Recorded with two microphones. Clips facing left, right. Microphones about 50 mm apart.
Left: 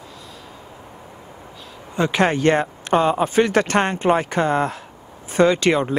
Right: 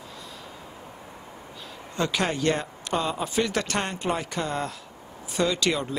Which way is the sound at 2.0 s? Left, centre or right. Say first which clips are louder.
Left 8 dB; left.